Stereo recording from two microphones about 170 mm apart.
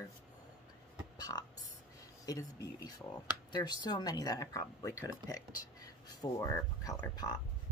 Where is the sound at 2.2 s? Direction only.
20° left (ahead or behind).